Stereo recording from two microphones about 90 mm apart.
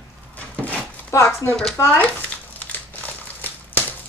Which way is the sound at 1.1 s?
30° left (ahead or behind).